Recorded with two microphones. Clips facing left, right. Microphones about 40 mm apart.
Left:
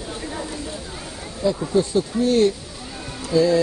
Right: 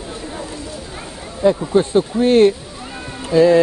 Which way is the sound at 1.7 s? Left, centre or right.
Right.